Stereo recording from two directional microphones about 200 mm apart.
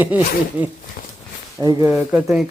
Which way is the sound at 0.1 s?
5° right (ahead or behind).